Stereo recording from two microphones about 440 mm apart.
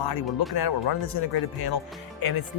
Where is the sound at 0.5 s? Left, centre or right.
Left.